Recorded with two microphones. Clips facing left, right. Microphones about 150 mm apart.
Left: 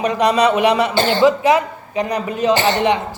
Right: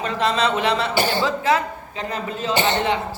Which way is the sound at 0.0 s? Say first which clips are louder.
Left 6 dB; 15° left (ahead or behind).